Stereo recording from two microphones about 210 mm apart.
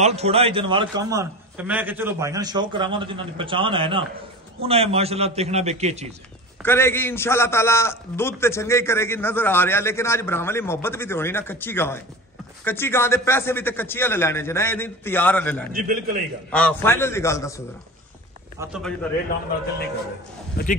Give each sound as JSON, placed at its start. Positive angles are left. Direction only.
{"t": 0.0, "sound": "a man's voice", "side_deg": -30}
{"t": 6.6, "sound": "a man's voice", "side_deg": 10}
{"t": 15.7, "sound": "a man's voice", "side_deg": -40}
{"t": 16.5, "sound": "a man's voice", "side_deg": 10}
{"t": 18.6, "sound": "a man's voice", "side_deg": -15}